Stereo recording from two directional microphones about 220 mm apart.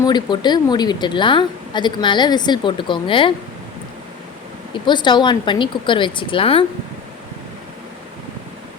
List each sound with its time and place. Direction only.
0.0 s a woman's voice: 20° left (ahead or behind)
4.7 s a woman's voice: 20° left (ahead or behind)